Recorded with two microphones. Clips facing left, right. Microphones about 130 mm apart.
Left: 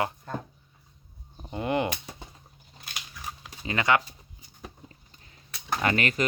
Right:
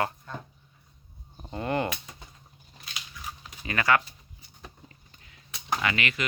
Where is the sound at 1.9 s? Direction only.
30° left (ahead or behind).